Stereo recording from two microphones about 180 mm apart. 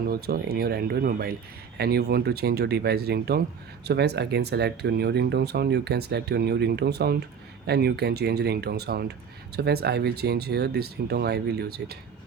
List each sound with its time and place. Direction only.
0.1 s speech: 60° right (ahead or behind)